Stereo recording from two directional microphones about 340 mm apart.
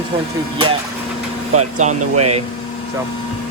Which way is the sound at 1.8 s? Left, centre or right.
Right.